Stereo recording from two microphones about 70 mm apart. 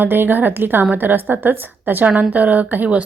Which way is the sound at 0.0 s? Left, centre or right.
Right.